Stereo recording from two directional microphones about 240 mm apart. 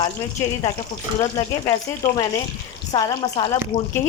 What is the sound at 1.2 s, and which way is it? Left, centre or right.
Speech, centre.